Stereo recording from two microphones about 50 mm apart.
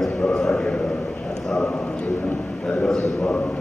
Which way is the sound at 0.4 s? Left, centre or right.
Centre.